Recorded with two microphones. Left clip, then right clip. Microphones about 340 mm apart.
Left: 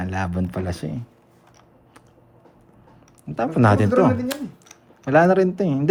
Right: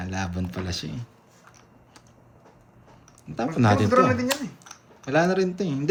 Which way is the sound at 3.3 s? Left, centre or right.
Left.